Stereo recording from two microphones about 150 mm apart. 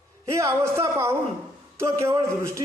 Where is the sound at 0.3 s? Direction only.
20° right (ahead or behind).